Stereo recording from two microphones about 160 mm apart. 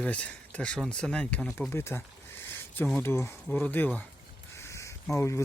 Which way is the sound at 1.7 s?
15° left (ahead or behind).